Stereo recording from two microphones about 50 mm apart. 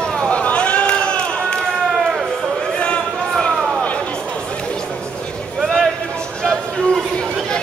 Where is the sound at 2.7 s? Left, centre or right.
Left.